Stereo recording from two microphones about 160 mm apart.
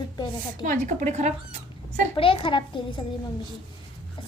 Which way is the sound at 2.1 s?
35° left (ahead or behind).